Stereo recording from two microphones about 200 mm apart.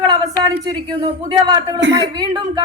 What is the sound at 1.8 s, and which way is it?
Speech, 60° right (ahead or behind).